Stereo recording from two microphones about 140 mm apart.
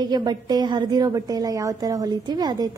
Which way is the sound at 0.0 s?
30° right (ahead or behind).